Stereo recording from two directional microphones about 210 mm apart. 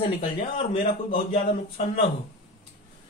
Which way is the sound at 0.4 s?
35° left (ahead or behind).